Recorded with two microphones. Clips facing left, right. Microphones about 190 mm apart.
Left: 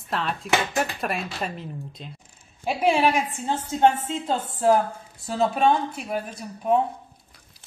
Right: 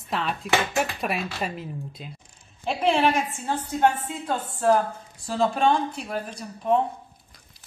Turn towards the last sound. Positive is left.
turn(degrees=5)  # may be behind; listen again after turning